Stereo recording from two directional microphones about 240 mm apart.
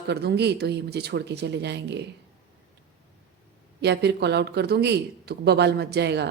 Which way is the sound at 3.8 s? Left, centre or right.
Right.